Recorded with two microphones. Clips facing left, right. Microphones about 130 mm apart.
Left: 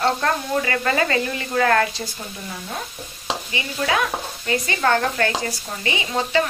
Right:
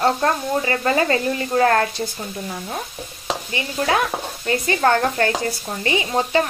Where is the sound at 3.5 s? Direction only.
40° right (ahead or behind).